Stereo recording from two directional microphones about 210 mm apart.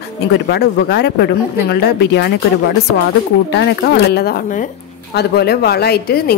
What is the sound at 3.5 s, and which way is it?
Speech, 55° left (ahead or behind).